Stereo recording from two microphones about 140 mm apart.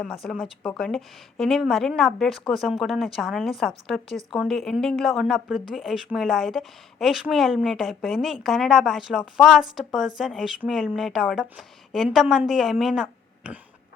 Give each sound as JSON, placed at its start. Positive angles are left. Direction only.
{"t": 0.0, "sound": "speech", "side_deg": 5}